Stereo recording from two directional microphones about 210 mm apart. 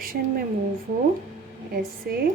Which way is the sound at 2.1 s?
45° right (ahead or behind).